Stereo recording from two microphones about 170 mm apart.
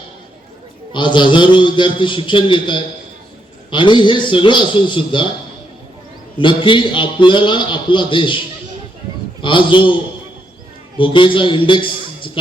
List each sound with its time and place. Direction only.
0.9 s a man's voice: 30° left (ahead or behind)
6.4 s a man's voice: 30° left (ahead or behind)
9.4 s a man's voice: 30° left (ahead or behind)
10.9 s a man's voice: 30° left (ahead or behind)